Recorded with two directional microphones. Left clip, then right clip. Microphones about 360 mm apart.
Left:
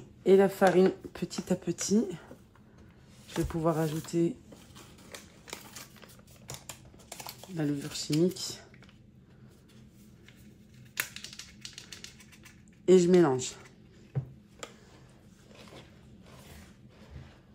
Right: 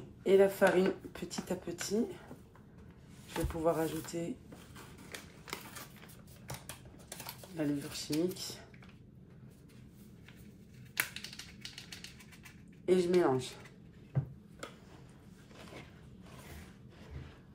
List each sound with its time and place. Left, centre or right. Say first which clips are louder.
0.2 s speech: left 4 dB; left
3.3 s speech: left 2 dB; left
7.5 s speech: left 3 dB; left
11.0 s typing: left 1 dB; centre
12.8 s speech: left 7 dB; left